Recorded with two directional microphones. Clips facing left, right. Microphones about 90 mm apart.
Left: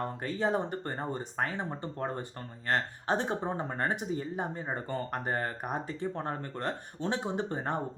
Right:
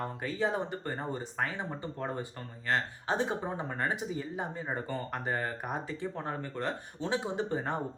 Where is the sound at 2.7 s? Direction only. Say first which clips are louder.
Left 1 dB; 45° left (ahead or behind).